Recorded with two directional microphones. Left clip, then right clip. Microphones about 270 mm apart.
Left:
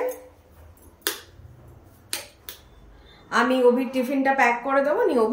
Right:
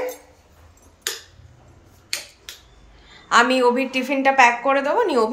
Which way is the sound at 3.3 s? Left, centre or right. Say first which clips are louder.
Right 6 dB; right.